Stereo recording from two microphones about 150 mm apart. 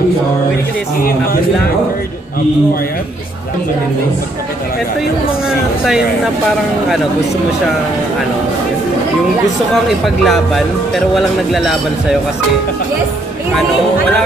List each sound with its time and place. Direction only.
9.8 s a man's voice: centre (ahead or behind)